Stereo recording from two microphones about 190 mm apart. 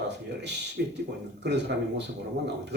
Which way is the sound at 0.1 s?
65° right (ahead or behind).